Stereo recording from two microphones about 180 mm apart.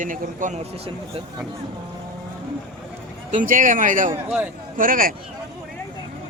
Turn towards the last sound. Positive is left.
turn(degrees=-50)  # may be behind; listen again after turning